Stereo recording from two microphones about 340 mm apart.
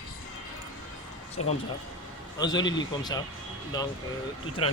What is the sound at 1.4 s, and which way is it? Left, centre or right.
A man's voice, centre.